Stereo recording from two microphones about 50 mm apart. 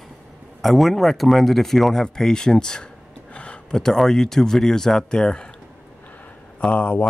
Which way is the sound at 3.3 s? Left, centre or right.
Left.